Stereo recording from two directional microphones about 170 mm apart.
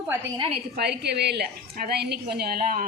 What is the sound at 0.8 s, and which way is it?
Speech, 75° right (ahead or behind).